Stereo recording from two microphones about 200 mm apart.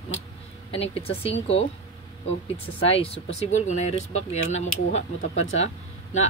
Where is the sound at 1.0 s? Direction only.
30° left (ahead or behind).